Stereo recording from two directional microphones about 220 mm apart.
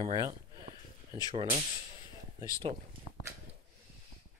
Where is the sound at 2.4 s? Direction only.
15° left (ahead or behind).